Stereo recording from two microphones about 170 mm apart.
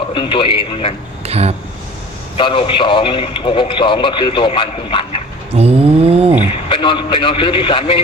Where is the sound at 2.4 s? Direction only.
30° left (ahead or behind).